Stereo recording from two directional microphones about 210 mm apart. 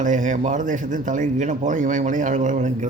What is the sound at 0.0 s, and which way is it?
Speech, 35° right (ahead or behind).